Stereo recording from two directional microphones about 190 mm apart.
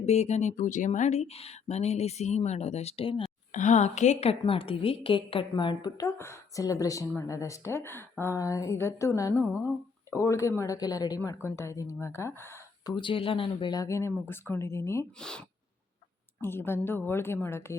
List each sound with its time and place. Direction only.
0.0 s speech: 35° left (ahead or behind)
3.5 s a woman's voice: 40° left (ahead or behind); by 12.9 s 15° left (ahead or behind)
13.0 s speech: 25° left (ahead or behind)